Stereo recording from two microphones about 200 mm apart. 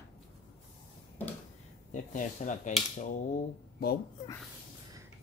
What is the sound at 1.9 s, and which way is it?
Speech, 40° left (ahead or behind).